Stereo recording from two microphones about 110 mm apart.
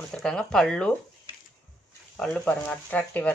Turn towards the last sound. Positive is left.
turn(degrees=15)  # may be behind; listen again after turning